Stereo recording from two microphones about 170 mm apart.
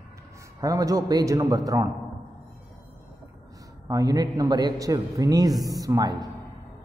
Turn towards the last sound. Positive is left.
turn(degrees=-25)  # may be behind; listen again after turning